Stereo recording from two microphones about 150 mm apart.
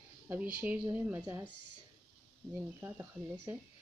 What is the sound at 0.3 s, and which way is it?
Speech, 10° right (ahead or behind).